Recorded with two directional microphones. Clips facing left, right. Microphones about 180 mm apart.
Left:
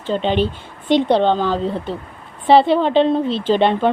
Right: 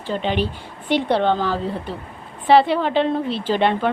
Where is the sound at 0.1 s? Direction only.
25° left (ahead or behind).